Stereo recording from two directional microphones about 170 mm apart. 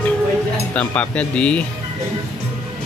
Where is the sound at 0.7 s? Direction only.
5° left (ahead or behind).